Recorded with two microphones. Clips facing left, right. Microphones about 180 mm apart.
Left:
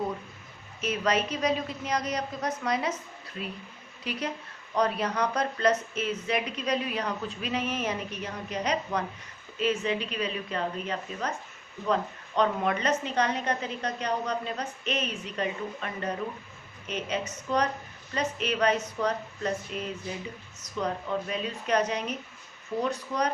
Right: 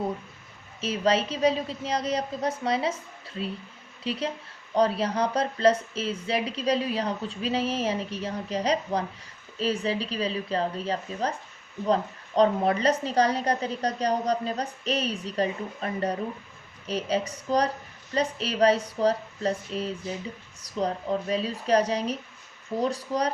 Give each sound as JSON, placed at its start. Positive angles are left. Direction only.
{"t": 0.8, "sound": "a woman's voice", "side_deg": -30}